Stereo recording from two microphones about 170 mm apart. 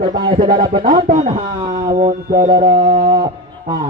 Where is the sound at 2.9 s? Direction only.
55° right (ahead or behind).